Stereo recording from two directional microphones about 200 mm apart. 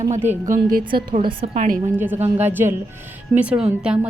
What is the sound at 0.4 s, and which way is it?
A woman's voice, 40° right (ahead or behind).